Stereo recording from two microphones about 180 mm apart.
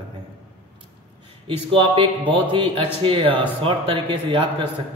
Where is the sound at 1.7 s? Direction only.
30° right (ahead or behind).